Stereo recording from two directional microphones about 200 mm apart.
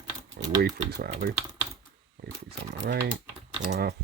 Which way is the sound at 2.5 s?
60° right (ahead or behind).